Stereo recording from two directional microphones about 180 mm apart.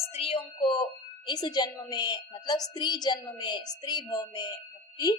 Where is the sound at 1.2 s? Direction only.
25° left (ahead or behind).